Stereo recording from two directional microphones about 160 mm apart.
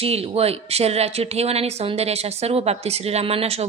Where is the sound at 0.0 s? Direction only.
40° right (ahead or behind).